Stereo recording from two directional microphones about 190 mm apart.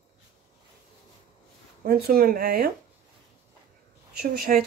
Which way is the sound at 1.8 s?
50° right (ahead or behind).